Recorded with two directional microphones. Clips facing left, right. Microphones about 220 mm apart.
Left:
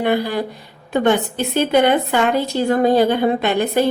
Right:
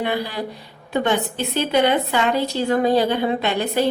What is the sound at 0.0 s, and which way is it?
A woman's voice, 50° left (ahead or behind).